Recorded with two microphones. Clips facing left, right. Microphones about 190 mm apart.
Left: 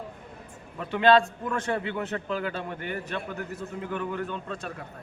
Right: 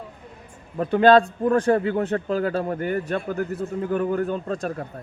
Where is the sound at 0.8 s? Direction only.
40° right (ahead or behind).